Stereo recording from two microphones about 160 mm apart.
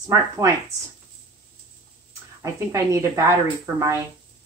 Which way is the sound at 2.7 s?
20° right (ahead or behind).